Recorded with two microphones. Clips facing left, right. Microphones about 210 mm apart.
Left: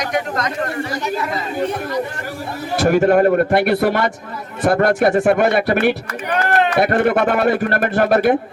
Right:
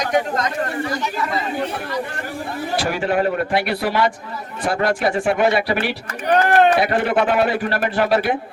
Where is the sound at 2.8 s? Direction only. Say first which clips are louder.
Left 8 dB; 50° left (ahead or behind).